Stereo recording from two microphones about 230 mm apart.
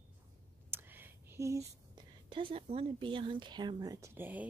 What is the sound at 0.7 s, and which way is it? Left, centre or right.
Whispering, centre.